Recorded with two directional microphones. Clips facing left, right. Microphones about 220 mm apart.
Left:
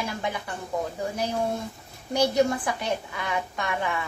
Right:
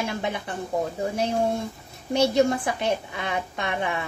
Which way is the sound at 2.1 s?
25° right (ahead or behind).